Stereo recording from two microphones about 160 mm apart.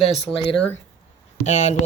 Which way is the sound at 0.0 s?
35° left (ahead or behind).